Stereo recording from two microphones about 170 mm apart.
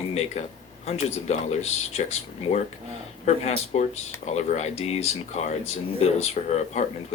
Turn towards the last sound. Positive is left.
turn(degrees=40)  # may be behind; listen again after turning